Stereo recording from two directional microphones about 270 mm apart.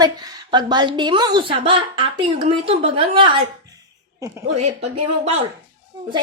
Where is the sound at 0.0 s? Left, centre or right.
Centre.